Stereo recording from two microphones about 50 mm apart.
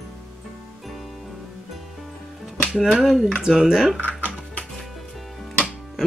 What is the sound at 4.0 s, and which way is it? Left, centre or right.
Music, right.